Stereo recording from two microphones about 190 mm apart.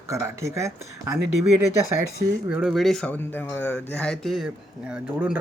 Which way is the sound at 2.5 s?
Centre (ahead or behind).